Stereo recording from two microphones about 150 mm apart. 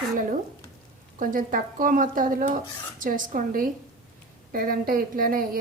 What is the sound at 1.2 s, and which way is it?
A woman's voice, 65° right (ahead or behind).